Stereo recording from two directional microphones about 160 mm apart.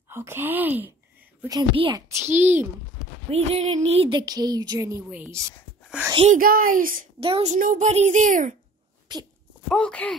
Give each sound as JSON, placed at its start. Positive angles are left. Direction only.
{"t": 0.1, "sound": "speech", "side_deg": -15}
{"t": 1.5, "sound": "a woman's voice", "side_deg": -30}
{"t": 2.1, "sound": "speech", "side_deg": -15}
{"t": 3.3, "sound": "a woman's voice", "side_deg": -40}
{"t": 6.3, "sound": "speech", "side_deg": -60}
{"t": 7.2, "sound": "a woman's voice", "side_deg": -35}
{"t": 7.5, "sound": "a woman's voice", "side_deg": -55}
{"t": 9.1, "sound": "speech", "side_deg": -25}
{"t": 9.7, "sound": "speech", "side_deg": 5}